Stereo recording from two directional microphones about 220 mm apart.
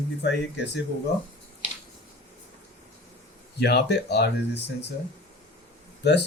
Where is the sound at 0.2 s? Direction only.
50° left (ahead or behind).